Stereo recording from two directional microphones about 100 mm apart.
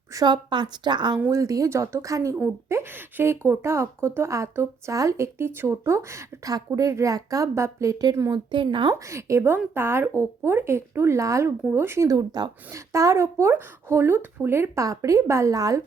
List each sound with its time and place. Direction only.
0.3 s a woman's voice: 50° right (ahead or behind)
1.3 s a woman's voice: 35° right (ahead or behind)
8.4 s speech: 55° right (ahead or behind)
9.0 s a woman's voice: 30° right (ahead or behind)
12.7 s a woman's voice: 30° right (ahead or behind)